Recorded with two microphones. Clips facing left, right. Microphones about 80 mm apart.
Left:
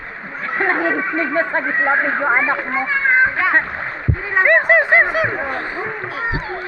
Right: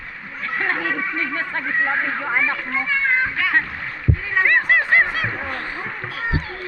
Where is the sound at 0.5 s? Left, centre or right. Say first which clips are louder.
Left 5 dB; left.